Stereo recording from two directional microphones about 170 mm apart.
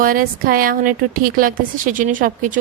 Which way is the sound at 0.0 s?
55° right (ahead or behind).